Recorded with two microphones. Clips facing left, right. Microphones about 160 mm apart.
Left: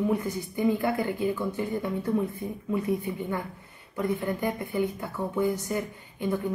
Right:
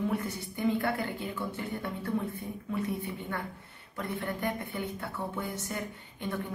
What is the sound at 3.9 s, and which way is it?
Speech, 15° left (ahead or behind).